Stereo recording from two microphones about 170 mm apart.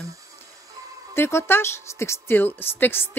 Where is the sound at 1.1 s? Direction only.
15° left (ahead or behind).